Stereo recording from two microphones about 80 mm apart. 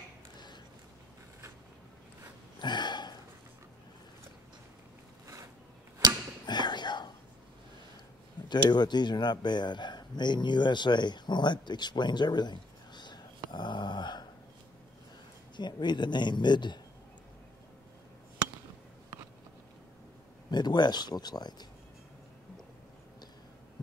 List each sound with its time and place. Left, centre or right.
2.6 s hiccup: left
5.2 s zipper: right
6.4 s a sound: left
8.5 s a man's voice: left
13.5 s dog: left
15.5 s a man's voice: left
20.5 s speech: left